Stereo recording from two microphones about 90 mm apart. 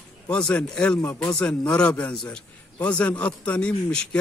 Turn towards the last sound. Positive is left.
turn(degrees=10)  # may be behind; listen again after turning